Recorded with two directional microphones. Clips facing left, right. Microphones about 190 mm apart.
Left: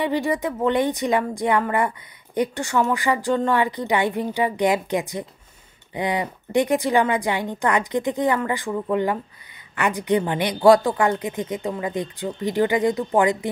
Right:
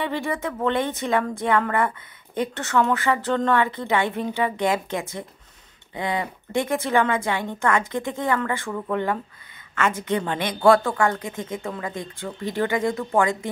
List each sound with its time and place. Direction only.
0.0 s a woman's voice: 15° left (ahead or behind)